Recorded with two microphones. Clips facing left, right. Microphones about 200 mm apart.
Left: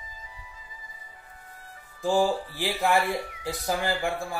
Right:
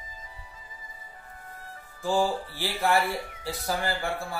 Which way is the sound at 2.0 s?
15° left (ahead or behind).